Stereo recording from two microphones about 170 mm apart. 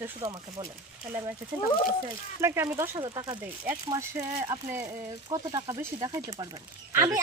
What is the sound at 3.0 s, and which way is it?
Speech, 25° right (ahead or behind).